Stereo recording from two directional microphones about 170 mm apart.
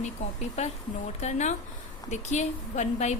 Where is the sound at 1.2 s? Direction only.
40° left (ahead or behind).